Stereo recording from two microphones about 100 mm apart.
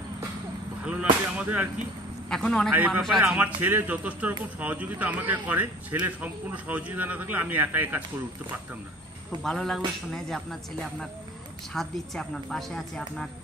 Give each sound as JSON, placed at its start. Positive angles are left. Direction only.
{"t": 0.8, "sound": "speech", "side_deg": -10}
{"t": 2.2, "sound": "a man's voice", "side_deg": 10}
{"t": 2.7, "sound": "speech", "side_deg": -15}
{"t": 3.0, "sound": "a woman's voice", "side_deg": 0}
{"t": 3.6, "sound": "speech", "side_deg": -15}
{"t": 9.4, "sound": "a woman's voice", "side_deg": 5}